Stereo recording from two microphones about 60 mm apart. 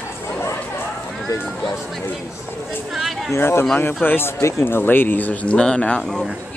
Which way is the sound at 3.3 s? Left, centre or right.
Left.